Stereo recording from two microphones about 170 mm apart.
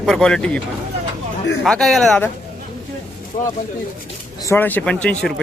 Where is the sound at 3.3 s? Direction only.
45° left (ahead or behind).